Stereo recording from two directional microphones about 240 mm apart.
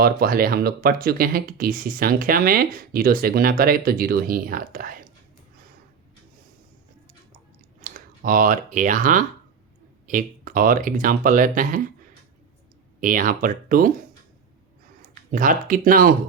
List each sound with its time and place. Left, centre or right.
0.0 s speech: right
7.8 s speech: right
13.0 s speech: right
15.0 s speech: right